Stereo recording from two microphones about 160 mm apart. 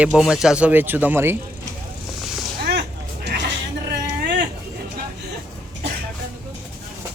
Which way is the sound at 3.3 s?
90° right.